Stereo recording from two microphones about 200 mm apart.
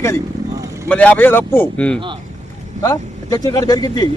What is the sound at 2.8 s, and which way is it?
Speech, 20° left (ahead or behind).